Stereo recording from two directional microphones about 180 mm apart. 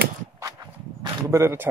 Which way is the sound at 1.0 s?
15° right (ahead or behind).